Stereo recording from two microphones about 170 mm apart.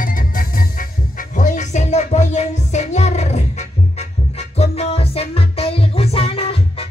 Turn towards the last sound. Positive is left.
turn(degrees=35)  # may be behind; listen again after turning